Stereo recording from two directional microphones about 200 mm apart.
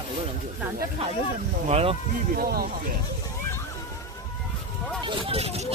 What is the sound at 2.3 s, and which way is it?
Speech, 45° right (ahead or behind).